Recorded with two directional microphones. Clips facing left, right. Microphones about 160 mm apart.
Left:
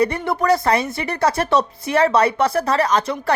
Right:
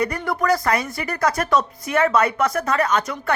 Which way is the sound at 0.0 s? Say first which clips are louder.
Left 3 dB; 30° left (ahead or behind).